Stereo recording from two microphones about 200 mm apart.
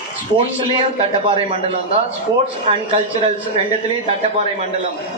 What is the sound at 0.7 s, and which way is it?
A man's voice, 25° right (ahead or behind).